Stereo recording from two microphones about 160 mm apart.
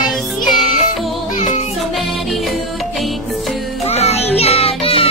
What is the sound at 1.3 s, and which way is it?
Music, 45° left (ahead or behind).